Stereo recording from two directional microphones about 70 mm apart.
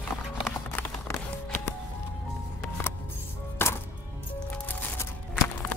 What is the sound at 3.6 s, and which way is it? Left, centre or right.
Chopping, left.